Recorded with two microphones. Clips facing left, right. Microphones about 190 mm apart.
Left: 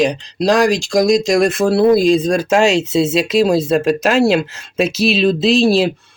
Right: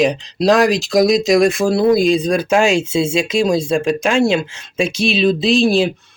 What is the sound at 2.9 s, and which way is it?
Speech, centre (ahead or behind).